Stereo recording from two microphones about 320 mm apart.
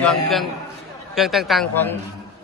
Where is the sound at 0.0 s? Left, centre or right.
Centre.